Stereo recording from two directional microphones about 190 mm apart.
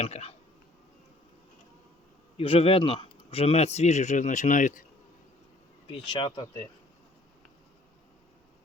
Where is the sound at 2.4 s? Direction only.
30° left (ahead or behind).